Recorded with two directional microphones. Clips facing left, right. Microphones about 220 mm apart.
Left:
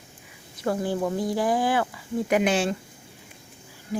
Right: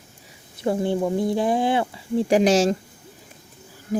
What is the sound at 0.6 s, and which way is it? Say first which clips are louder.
Speech: right 3 dB; 25° right (ahead or behind).